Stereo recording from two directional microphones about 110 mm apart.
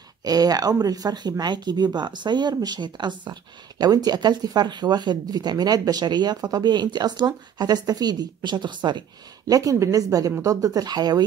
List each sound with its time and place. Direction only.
0.2 s speech: 35° right (ahead or behind)
9.5 s speech: 30° right (ahead or behind)